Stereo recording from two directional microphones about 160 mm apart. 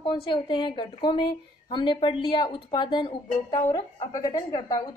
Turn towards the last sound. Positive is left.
turn(degrees=25)  # may be behind; listen again after turning